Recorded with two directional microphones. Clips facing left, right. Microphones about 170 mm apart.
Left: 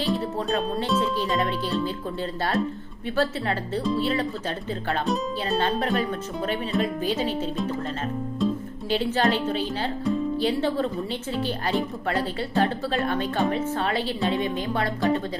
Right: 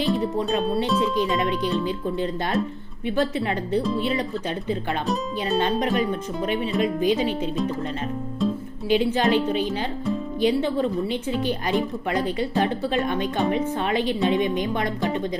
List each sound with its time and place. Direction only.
1.1 s speech: 15° right (ahead or behind)
5.5 s speech: 15° right (ahead or behind)
9.1 s speech: 15° right (ahead or behind)